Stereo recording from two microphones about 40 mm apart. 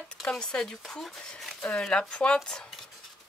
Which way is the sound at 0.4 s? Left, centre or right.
Centre.